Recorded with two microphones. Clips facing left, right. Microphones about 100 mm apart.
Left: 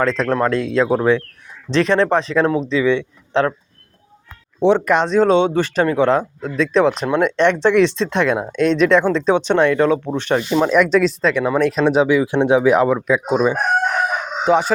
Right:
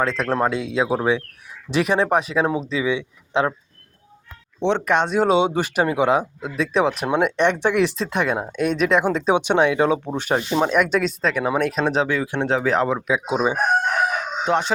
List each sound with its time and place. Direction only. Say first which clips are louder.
0.0 s speech: left 4 dB; 5° right (ahead or behind)
0.3 s speech: left 3 dB; 15° right (ahead or behind)
4.6 s speech: left 5 dB; 5° left (ahead or behind)
14.4 s speech: left 6 dB; 5° left (ahead or behind)